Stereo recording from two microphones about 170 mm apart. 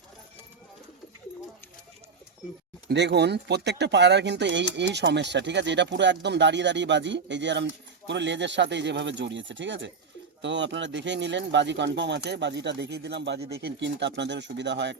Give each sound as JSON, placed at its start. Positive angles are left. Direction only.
{"t": 2.9, "sound": "speech", "side_deg": -90}